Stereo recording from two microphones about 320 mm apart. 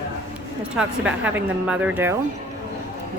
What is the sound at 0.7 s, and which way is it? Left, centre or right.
A woman's voice, centre.